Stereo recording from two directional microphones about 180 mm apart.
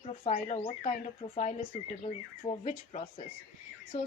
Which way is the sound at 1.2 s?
45° left (ahead or behind).